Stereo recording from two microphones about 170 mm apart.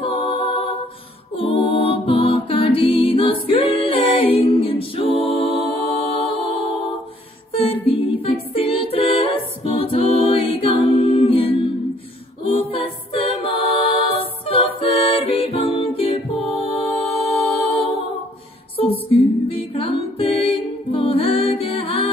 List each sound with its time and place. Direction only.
0.0 s a capella: 30° left (ahead or behind)
1.3 s music: 35° left (ahead or behind)
12.4 s a capella: 30° left (ahead or behind)
18.8 s music: 35° left (ahead or behind)
19.7 s a capella: 30° left (ahead or behind)